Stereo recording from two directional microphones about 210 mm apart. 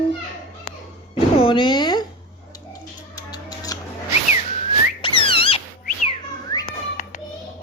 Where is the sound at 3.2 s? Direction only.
20° left (ahead or behind).